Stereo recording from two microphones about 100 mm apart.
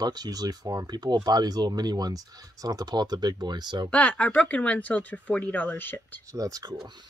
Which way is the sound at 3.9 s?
15° left (ahead or behind).